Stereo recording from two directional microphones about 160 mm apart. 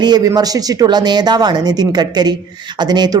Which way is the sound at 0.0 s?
25° right (ahead or behind).